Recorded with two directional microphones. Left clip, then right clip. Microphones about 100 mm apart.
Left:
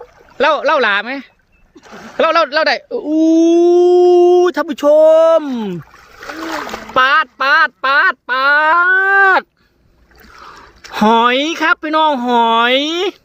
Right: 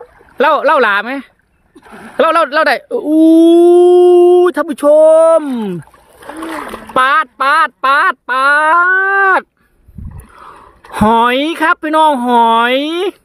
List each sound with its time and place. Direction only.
0.3 s speech: 70° right (ahead or behind); by 1.3 s 50° right (ahead or behind)
1.9 s speech: centre (ahead or behind)
2.1 s speech: 60° right (ahead or behind); by 6.2 s 25° right (ahead or behind)
6.4 s splash: 5° right (ahead or behind)
6.9 s speech: 25° right (ahead or behind); by 9.5 s 10° right (ahead or behind)
10.9 s speech: 20° right (ahead or behind)